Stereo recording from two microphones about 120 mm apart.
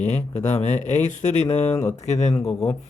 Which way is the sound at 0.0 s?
70° left (ahead or behind).